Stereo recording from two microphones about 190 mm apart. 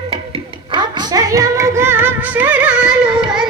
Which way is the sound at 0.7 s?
25° right (ahead or behind).